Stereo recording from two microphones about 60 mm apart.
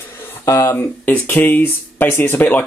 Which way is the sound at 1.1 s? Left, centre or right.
Left.